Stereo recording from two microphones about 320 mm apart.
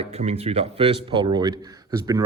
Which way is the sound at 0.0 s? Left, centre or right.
Centre.